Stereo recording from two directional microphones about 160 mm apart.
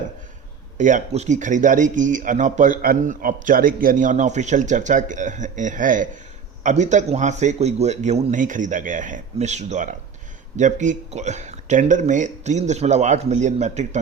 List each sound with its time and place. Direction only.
0.8 s speech: 50° right (ahead or behind)